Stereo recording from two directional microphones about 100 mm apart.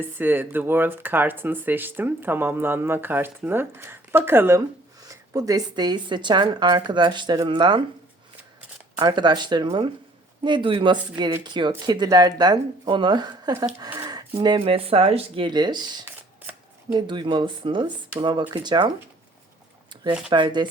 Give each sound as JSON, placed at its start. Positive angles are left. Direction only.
{"t": 0.0, "sound": "speech", "side_deg": -20}
{"t": 5.0, "sound": "speech", "side_deg": -35}
{"t": 9.0, "sound": "speech", "side_deg": -45}
{"t": 13.9, "sound": "a sound", "side_deg": -40}
{"t": 14.6, "sound": "speech", "side_deg": -70}
{"t": 15.4, "sound": "speech", "side_deg": -45}
{"t": 20.3, "sound": "speech", "side_deg": -50}